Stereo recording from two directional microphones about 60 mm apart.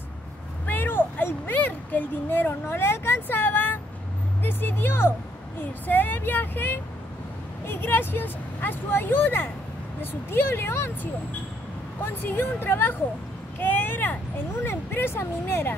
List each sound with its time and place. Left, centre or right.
0.7 s speech: left
12.0 s speech: left
13.6 s vehicle: left
14.6 s speech: left